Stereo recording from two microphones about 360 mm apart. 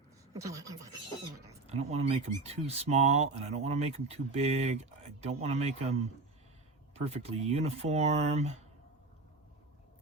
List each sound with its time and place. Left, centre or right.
0.3 s speech: centre